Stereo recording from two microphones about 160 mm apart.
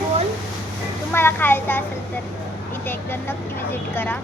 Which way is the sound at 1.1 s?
15° left (ahead or behind).